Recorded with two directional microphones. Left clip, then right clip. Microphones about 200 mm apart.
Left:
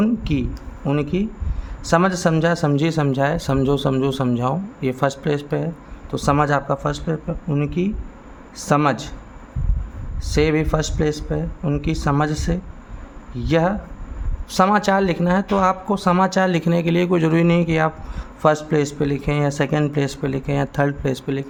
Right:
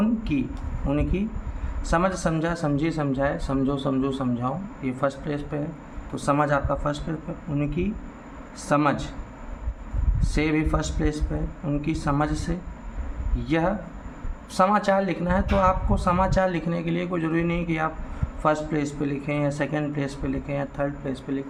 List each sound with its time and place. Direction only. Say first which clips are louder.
0.0 s a sound: left 4 dB; 45° left (ahead or behind)
0.9 s speech: left 5 dB; 40° left (ahead or behind)
10.2 s speech: left 6 dB; 40° left (ahead or behind)